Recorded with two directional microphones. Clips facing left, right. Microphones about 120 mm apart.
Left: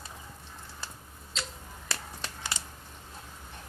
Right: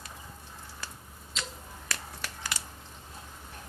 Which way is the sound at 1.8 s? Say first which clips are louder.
Left 1 dB; 25° left (ahead or behind).